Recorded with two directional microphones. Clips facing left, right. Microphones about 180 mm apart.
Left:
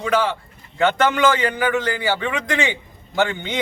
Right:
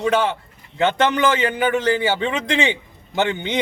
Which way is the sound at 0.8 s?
20° right (ahead or behind).